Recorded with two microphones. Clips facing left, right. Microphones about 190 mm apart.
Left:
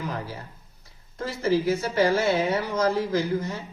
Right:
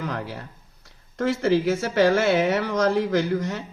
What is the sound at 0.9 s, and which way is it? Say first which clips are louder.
Speech: right 9 dB; 75° right (ahead or behind).